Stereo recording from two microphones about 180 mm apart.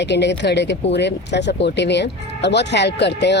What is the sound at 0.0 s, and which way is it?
Speech, 75° left (ahead or behind).